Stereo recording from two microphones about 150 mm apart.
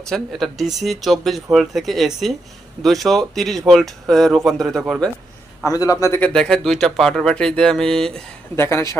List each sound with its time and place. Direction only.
0.1 s speech: centre (ahead or behind)
5.6 s speech: 25° left (ahead or behind); by 8.2 s 5° left (ahead or behind)
8.5 s speech: 15° left (ahead or behind)